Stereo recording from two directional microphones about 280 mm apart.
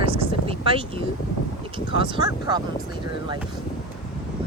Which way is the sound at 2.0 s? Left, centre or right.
Centre.